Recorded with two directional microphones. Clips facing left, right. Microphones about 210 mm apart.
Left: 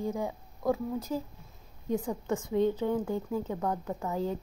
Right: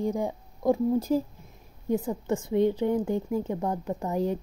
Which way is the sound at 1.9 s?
5° right (ahead or behind).